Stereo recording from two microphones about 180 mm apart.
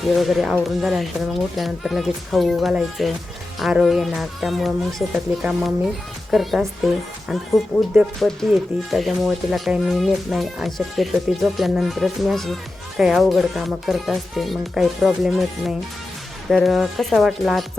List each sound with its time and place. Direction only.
0.1 s speech: centre (ahead or behind)